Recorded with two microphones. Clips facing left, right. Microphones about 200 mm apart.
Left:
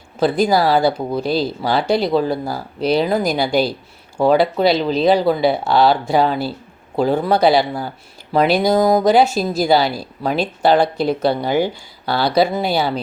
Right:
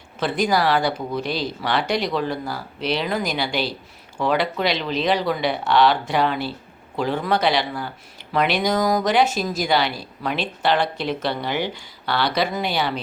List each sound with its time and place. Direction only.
0.2 s speech: 35° left (ahead or behind)